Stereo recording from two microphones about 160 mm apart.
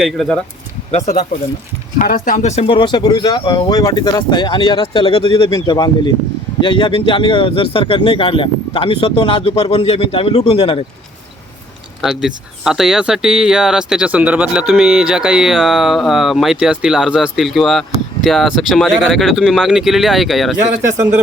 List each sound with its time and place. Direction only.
0.0 s speech: centre (ahead or behind)
0.9 s speech: 45° left (ahead or behind)
2.0 s speech: 55° left (ahead or behind); by 5.5 s 35° left (ahead or behind)
5.5 s speech: 25° left (ahead or behind)
12.0 s speech: 5° right (ahead or behind)